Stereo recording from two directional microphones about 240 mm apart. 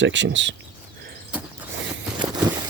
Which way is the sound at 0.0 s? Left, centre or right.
Right.